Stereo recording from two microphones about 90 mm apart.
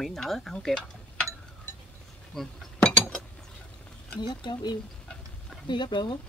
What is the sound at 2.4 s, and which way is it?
Chink, 10° left (ahead or behind).